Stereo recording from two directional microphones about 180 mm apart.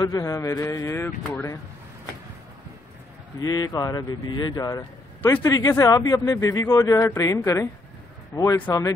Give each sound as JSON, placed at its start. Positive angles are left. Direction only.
{"t": 0.0, "sound": "speech", "side_deg": 20}
{"t": 3.3, "sound": "speech", "side_deg": 20}